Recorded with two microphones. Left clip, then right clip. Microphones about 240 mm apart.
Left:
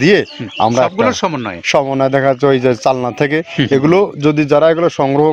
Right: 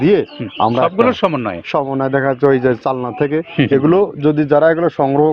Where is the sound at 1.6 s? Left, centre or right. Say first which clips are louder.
Left 7 dB; left.